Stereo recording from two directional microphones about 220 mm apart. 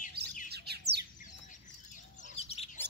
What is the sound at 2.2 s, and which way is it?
Bird, 25° left (ahead or behind).